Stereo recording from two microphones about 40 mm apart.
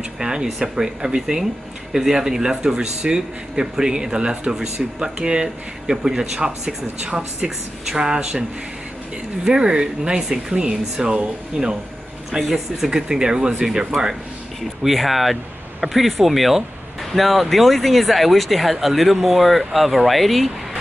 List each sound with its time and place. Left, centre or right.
0.2 s speech: centre
12.3 s speech: centre
14.8 s speech: centre